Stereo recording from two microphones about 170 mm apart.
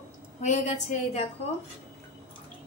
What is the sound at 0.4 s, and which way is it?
Speech, 45° left (ahead or behind).